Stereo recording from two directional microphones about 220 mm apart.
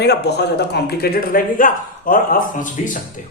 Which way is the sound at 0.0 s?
50° left (ahead or behind).